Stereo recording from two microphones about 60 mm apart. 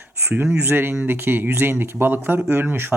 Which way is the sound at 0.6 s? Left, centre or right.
Right.